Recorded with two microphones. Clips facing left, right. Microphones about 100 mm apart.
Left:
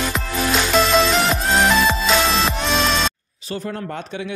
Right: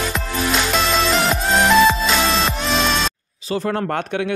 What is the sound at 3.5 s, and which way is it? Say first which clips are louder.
Speech: right 6 dB; 90° right.